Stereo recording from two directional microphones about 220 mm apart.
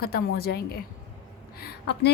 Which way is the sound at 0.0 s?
45° left (ahead or behind).